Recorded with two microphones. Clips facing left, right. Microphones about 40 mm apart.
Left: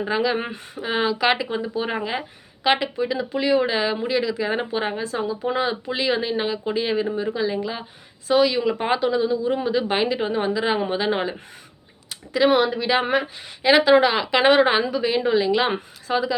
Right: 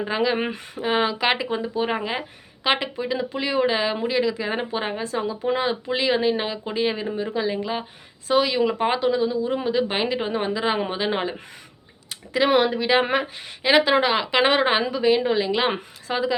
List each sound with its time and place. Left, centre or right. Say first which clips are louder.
0.1 s speech: even; right
2.6 s speech: left 2 dB; right
4.4 s speech: left 2 dB; centre
5.6 s speech: right 1 dB; right
8.8 s speech: even; centre
9.1 s speech: left 1 dB; centre
9.6 s speech: left 1 dB; centre
12.4 s speech: left 1 dB; right
13.6 s speech: left 3 dB; centre